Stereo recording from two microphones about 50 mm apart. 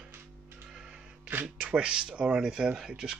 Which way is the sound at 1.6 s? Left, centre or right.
Centre.